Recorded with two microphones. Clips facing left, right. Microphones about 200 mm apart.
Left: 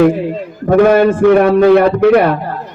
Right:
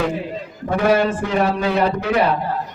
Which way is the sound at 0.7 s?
55° left (ahead or behind).